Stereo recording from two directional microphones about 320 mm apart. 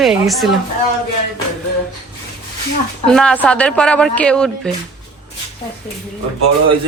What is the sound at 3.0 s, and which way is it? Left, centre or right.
Speech, centre.